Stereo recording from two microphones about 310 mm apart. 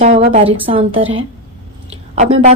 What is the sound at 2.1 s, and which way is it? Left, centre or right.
Speech, right.